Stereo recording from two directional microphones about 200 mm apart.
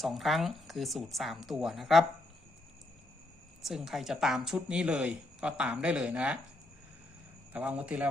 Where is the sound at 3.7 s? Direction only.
Centre (ahead or behind).